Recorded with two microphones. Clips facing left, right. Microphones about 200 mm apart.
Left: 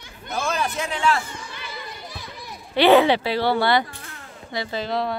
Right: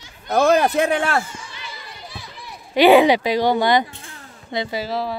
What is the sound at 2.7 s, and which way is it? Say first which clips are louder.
A child's voice: right 3 dB; 15° right (ahead or behind).